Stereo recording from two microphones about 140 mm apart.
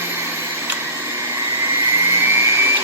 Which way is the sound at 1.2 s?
20° right (ahead or behind).